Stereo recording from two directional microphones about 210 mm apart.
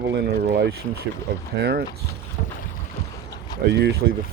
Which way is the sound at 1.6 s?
50° right (ahead or behind).